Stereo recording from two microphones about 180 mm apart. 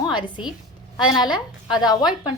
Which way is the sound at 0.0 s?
25° left (ahead or behind).